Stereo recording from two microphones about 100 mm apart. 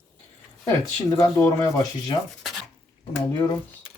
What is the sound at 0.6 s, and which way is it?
Speech, 35° left (ahead or behind).